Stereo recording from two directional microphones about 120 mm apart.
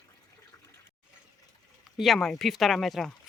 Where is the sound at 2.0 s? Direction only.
Centre (ahead or behind).